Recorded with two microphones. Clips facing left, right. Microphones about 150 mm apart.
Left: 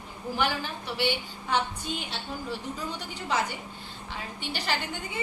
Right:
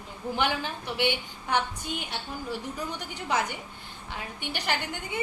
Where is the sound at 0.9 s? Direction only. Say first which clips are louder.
Even; 15° right (ahead or behind).